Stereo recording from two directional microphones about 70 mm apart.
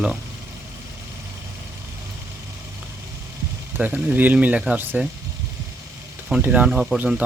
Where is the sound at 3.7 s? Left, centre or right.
Right.